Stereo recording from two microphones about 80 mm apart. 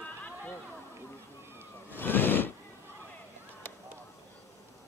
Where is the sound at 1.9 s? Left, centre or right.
Left.